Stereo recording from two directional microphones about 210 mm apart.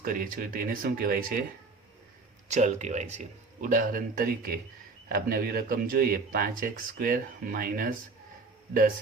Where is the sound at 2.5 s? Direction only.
35° right (ahead or behind).